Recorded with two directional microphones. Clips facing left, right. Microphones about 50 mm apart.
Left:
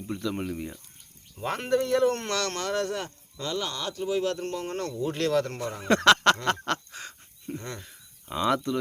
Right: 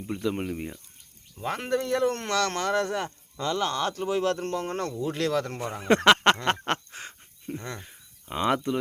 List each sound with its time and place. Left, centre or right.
0.1 s speech: centre
1.4 s speech: centre
3.4 s speech: right
4.9 s speech: centre
7.8 s speech: right